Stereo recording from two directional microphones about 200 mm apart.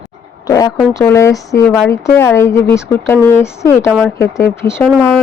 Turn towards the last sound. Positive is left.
turn(degrees=5)  # may be behind; listen again after turning